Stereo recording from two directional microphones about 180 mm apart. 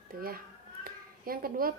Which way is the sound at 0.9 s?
55° right (ahead or behind).